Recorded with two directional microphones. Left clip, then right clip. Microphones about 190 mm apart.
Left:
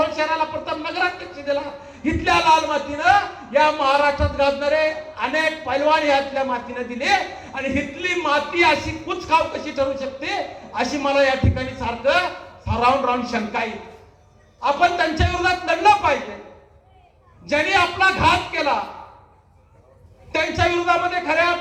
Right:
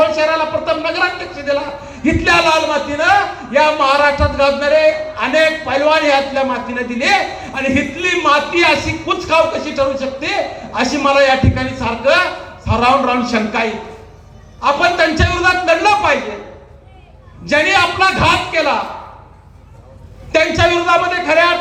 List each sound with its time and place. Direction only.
0.0 s a sound: 10° right (ahead or behind)
2.0 s a man's voice: 10° right (ahead or behind)
17.4 s a man's voice: 10° right (ahead or behind)
20.3 s a man's voice: 10° right (ahead or behind)